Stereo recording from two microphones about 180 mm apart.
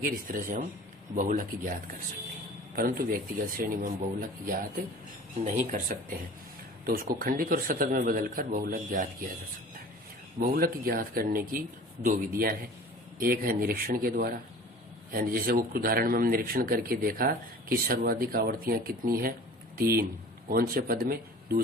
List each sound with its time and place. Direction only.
0.0 s speech: 50° right (ahead or behind)
10.5 s speech: 55° right (ahead or behind)